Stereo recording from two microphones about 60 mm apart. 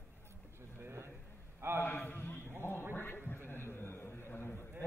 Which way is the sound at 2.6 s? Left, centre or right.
Left.